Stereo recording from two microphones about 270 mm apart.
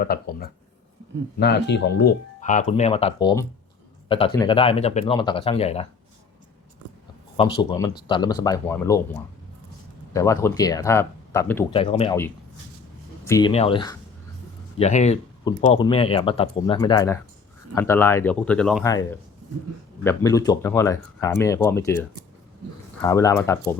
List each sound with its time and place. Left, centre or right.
0.0 s speech: left
7.3 s speech: centre
10.1 s speech: centre
11.7 s speech: centre
13.2 s speech: centre
20.1 s speech: centre